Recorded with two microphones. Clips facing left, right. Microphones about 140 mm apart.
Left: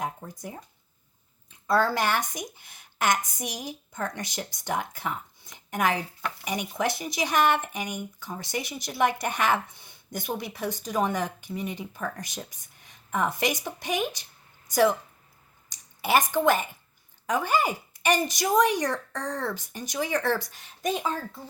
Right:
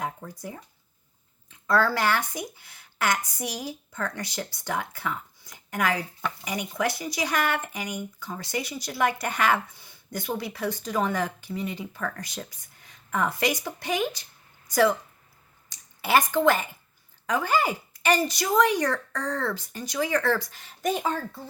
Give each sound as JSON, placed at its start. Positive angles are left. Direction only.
{"t": 0.0, "sound": "speech", "side_deg": 20}
{"t": 1.7, "sound": "speech", "side_deg": 20}